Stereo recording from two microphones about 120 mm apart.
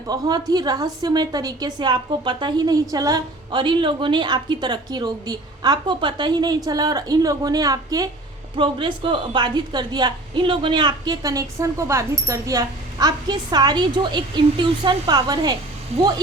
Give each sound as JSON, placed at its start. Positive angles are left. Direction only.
{"t": 0.1, "sound": "a woman's voice", "side_deg": -35}
{"t": 8.5, "sound": "a woman's voice", "side_deg": -45}